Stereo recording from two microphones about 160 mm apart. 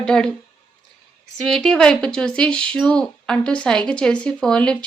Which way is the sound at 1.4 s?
5° left (ahead or behind).